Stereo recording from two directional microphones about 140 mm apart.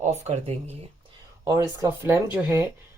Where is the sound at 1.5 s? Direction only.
25° right (ahead or behind).